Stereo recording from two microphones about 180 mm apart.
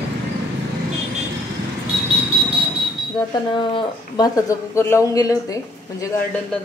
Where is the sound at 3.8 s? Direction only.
20° left (ahead or behind).